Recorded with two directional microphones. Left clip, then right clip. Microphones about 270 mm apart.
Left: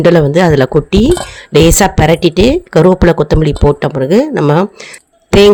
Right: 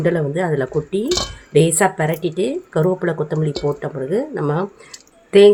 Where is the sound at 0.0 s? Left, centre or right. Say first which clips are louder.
Left 11 dB; left.